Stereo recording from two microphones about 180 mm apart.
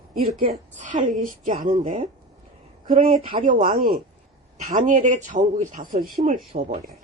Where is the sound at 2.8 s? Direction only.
50° right (ahead or behind).